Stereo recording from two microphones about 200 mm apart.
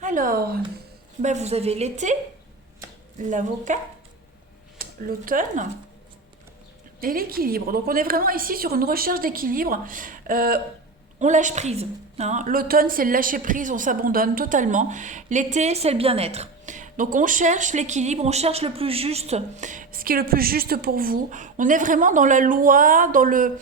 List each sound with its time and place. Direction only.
0.0 s speech: 40° right (ahead or behind)
1.2 s a woman's voice: 35° right (ahead or behind)
3.2 s a woman's voice: 40° right (ahead or behind)
4.8 s speech: 45° right (ahead or behind)
7.0 s a woman's voice: 45° right (ahead or behind)